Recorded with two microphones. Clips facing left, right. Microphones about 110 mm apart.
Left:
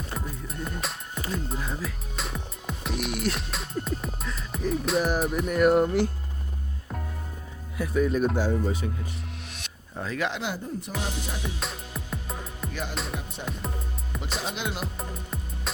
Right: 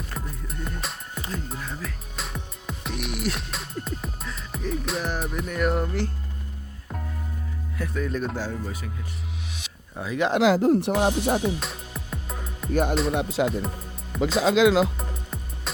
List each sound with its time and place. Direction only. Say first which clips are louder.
0.1 s music: left 1 dB; centre (ahead or behind)
1.3 s music: left 3 dB; 10° left (ahead or behind)
1.8 s music: left 1 dB; centre (ahead or behind)
5.8 s speech: left 5 dB; 15° left (ahead or behind)
7.8 s speech: left 5 dB; 10° left (ahead or behind)
8.6 s speech: left 6 dB; 25° left (ahead or behind)
9.5 s music: right 2 dB; centre (ahead or behind)
10.1 s speech: right 5 dB; 25° right (ahead or behind)
10.4 s speech: right 14 dB; 90° right; by 11.4 s 60° right (ahead or behind)
11.6 s music: even; centre (ahead or behind)
13.1 s music: right 12 dB; 90° right
14.1 s music: right 12 dB; centre (ahead or behind)
14.6 s music: right 14 dB; 90° right
14.9 s music: even; centre (ahead or behind)